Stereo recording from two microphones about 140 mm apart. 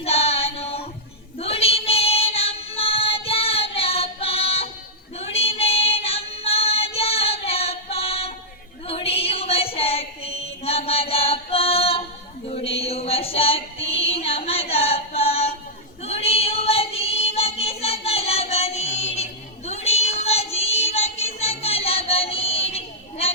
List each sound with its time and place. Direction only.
0.0 s a sound: 45° left (ahead or behind)
1.4 s child singing: 45° left (ahead or behind)
8.9 s female singing: 45° left (ahead or behind)
12.5 s music: 45° left (ahead or behind)
16.0 s child singing: 45° left (ahead or behind)